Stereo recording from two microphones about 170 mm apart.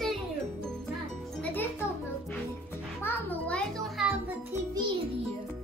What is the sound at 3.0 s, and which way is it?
Music, 10° left (ahead or behind).